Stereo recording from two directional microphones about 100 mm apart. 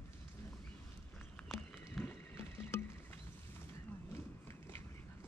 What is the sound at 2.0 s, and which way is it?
Rowboat, 25° left (ahead or behind).